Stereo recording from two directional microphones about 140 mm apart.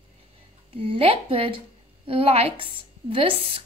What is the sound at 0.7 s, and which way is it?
A woman's voice, 40° right (ahead or behind).